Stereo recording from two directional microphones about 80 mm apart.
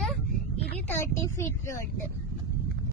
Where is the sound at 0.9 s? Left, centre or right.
Left.